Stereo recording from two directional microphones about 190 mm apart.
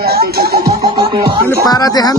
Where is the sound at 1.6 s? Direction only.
20° left (ahead or behind).